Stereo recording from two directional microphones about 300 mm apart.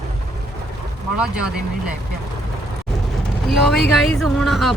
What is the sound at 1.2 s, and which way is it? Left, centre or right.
Speech, centre.